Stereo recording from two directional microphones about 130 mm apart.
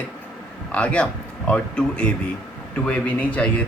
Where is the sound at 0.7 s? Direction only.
10° left (ahead or behind).